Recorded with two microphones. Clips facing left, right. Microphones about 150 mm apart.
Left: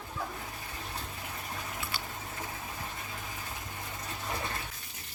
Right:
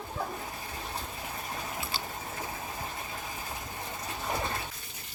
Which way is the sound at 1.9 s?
30° right (ahead or behind).